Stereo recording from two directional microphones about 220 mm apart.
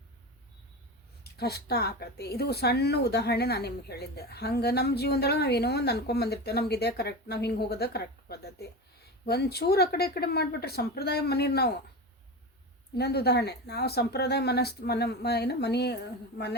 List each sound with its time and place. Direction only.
1.2 s a woman's voice: 45° left (ahead or behind)
13.0 s a woman's voice: 45° left (ahead or behind)